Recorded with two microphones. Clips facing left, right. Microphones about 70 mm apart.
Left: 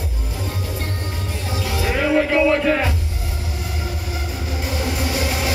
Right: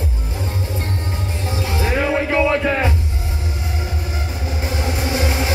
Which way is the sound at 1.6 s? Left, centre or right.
Right.